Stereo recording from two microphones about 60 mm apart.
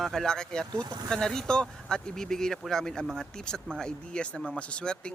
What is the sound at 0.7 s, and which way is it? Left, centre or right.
Speech, right.